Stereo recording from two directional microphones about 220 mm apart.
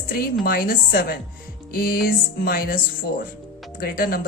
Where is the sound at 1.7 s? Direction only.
45° left (ahead or behind).